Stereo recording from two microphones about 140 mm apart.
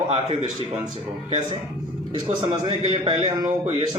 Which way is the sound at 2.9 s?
50° right (ahead or behind).